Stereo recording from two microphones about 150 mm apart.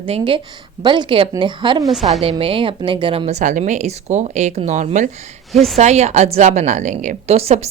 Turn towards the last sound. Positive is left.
turn(degrees=-45)  # may be behind; listen again after turning